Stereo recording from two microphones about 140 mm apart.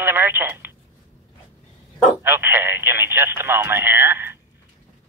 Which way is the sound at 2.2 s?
15° right (ahead or behind).